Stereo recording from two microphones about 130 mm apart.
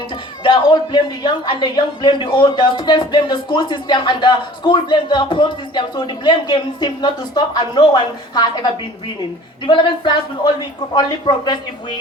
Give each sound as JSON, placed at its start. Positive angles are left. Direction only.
{"t": 0.4, "sound": "a man's voice", "side_deg": 35}